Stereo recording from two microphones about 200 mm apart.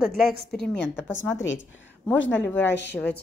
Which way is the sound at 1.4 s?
65° left (ahead or behind).